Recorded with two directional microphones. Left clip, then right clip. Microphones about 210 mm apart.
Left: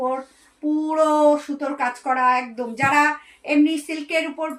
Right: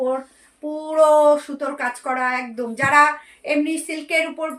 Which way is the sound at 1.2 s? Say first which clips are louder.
Right 2 dB; 25° right (ahead or behind).